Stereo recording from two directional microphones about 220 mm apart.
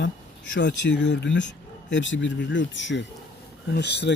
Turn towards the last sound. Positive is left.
turn(degrees=50)  # may be behind; listen again after turning